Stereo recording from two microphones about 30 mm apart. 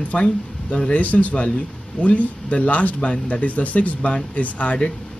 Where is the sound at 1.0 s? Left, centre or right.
Left.